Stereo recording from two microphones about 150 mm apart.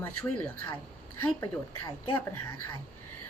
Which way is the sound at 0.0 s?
15° left (ahead or behind).